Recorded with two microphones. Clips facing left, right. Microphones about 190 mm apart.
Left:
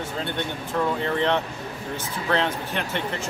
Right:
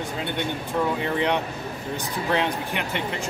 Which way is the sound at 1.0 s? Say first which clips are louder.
Left 1 dB; 15° right (ahead or behind).